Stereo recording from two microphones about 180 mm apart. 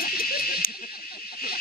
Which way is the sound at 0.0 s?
55° left (ahead or behind).